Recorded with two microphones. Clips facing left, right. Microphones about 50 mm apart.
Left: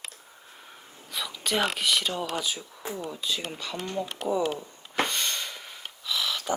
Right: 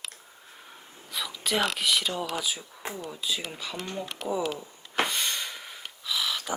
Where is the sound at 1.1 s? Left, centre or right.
Centre.